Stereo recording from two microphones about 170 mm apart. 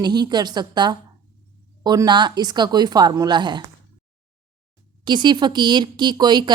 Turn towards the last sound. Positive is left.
turn(degrees=-25)  # may be behind; listen again after turning